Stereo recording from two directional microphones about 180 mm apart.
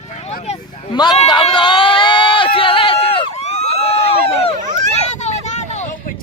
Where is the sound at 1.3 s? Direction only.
25° left (ahead or behind).